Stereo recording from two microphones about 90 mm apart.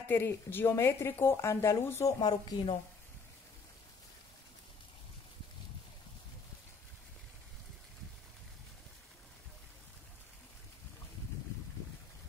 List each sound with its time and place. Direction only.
0.1 s speech: 25° left (ahead or behind)
2.1 s speech: 60° left (ahead or behind)